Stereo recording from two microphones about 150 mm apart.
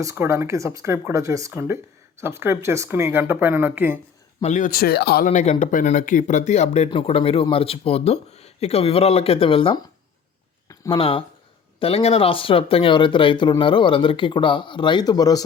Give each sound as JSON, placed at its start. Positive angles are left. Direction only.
{"t": 0.0, "sound": "speech", "side_deg": -20}
{"t": 4.4, "sound": "speech", "side_deg": 60}
{"t": 5.3, "sound": "speech", "side_deg": 55}
{"t": 10.9, "sound": "speech", "side_deg": 35}